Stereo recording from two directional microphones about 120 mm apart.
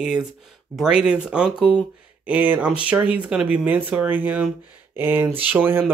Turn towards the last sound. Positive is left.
turn(degrees=-15)  # may be behind; listen again after turning